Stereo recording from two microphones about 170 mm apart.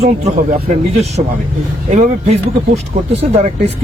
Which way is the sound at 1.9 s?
40° right (ahead or behind).